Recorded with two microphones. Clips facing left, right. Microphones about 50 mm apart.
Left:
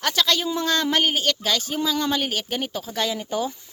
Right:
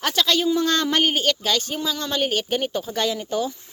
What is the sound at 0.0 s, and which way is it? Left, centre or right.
A woman's voice, centre.